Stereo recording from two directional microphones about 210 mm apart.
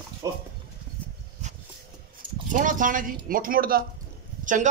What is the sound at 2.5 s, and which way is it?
A man's voice, 40° right (ahead or behind).